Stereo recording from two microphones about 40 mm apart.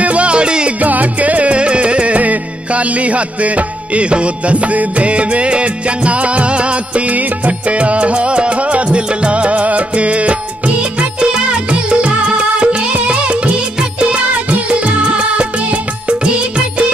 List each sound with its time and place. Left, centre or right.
0.0 s music: right
0.7 s music: right